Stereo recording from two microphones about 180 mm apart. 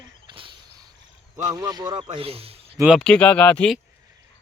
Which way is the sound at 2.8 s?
Centre (ahead or behind).